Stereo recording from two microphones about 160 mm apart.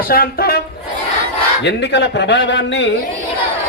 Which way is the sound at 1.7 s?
90° left.